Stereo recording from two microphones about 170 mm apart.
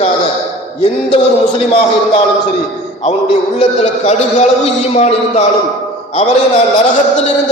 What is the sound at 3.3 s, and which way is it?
A man's voice, 40° left (ahead or behind).